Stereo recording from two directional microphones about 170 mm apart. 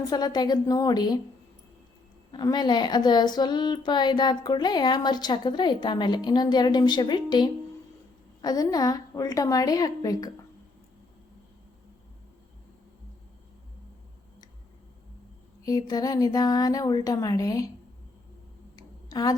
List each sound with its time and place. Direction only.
0.0 s a woman's voice: 25° left (ahead or behind)
2.3 s a woman's voice: 25° left (ahead or behind)
15.6 s a woman's voice: 20° left (ahead or behind)
18.8 s a sound: 20° left (ahead or behind)